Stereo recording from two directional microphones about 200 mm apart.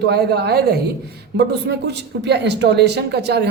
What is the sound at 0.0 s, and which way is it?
Speech, 55° right (ahead or behind).